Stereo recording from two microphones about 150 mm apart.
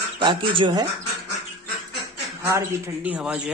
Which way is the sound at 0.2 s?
35° right (ahead or behind).